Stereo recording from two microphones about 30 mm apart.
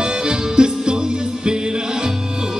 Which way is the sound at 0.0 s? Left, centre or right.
Right.